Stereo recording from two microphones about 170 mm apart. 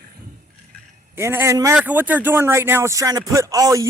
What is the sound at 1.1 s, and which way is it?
Speech, 15° right (ahead or behind).